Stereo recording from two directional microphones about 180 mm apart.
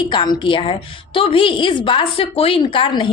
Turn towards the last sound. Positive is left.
turn(degrees=25)  # may be behind; listen again after turning